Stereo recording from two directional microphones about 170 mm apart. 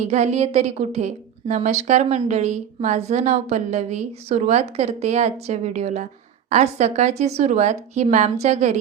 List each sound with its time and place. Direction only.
0.0 s a woman's voice: 40° right (ahead or behind)